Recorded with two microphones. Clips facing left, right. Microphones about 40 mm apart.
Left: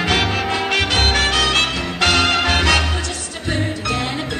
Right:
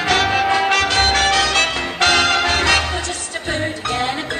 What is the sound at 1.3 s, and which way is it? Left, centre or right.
Music, left.